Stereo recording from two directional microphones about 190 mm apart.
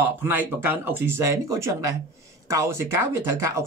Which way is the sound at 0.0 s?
10° right (ahead or behind).